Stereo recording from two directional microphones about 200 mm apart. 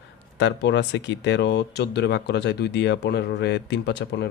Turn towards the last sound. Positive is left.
turn(degrees=55)  # may be behind; listen again after turning